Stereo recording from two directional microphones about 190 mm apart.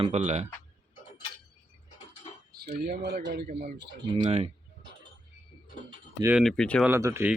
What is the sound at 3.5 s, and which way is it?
Speech, 40° right (ahead or behind).